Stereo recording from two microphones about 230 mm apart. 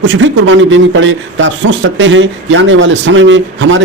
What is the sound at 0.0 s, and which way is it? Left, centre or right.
A man's voice, right.